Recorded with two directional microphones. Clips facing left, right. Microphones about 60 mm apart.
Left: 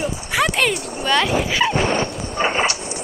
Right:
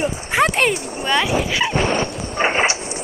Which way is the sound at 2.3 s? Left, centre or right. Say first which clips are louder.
Right 2 dB; right.